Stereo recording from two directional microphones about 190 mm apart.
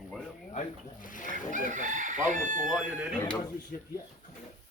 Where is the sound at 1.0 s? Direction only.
45° left (ahead or behind).